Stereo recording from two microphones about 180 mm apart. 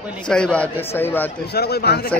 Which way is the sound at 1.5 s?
65° left (ahead or behind).